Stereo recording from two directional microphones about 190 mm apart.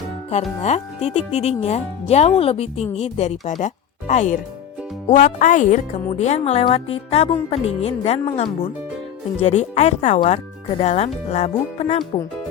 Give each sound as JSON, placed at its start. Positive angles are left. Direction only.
{"t": 0.6, "sound": "speech", "side_deg": 35}